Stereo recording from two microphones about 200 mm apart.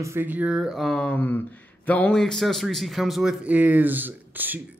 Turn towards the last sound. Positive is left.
turn(degrees=-10)  # may be behind; listen again after turning